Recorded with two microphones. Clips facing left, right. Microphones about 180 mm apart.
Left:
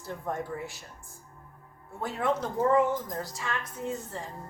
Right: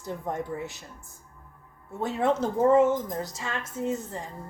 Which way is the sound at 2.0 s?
25° right (ahead or behind).